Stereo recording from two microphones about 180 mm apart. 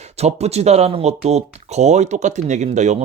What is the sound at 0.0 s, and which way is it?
Speech, 35° right (ahead or behind).